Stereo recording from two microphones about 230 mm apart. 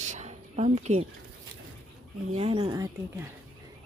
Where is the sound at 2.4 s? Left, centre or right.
Right.